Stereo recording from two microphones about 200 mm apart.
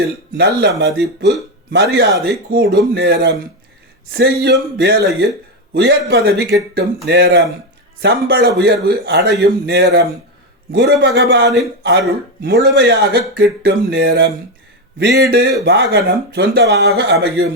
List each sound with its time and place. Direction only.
0.3 s speech: 55° right (ahead or behind)
12.6 s speech: 60° right (ahead or behind)